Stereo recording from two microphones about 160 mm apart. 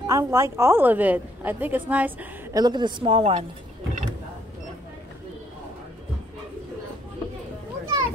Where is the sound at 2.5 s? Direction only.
25° right (ahead or behind).